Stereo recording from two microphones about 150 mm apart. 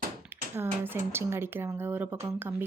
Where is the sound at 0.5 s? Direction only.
15° right (ahead or behind).